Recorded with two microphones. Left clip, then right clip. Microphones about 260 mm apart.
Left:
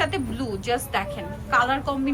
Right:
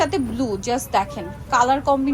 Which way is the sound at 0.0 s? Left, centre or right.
Right.